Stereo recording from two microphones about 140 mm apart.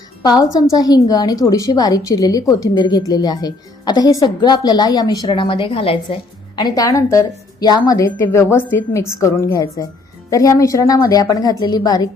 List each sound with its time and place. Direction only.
0.2 s a woman's voice: 30° left (ahead or behind)
6.6 s a woman's voice: 30° left (ahead or behind)